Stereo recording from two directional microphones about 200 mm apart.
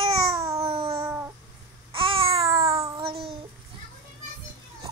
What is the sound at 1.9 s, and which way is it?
Babbling, 25° right (ahead or behind).